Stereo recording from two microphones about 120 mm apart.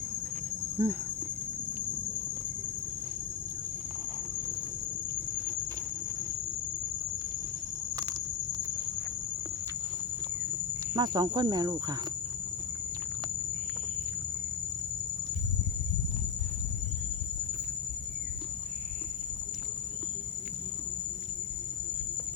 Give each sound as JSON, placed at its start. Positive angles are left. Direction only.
{"t": 0.8, "sound": "speech", "side_deg": -20}
{"t": 10.9, "sound": "speech", "side_deg": -35}